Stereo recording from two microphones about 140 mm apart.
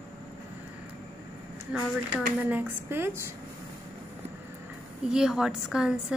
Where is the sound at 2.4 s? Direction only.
15° right (ahead or behind).